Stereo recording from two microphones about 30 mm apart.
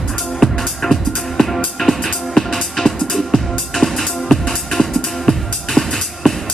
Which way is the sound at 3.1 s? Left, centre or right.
Centre.